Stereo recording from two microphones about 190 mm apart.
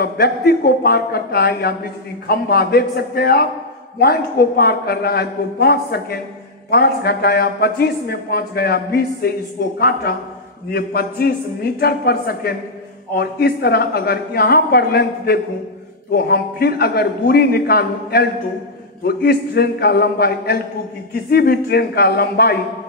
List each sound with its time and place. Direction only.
0.0 s a man's voice: 55° left (ahead or behind)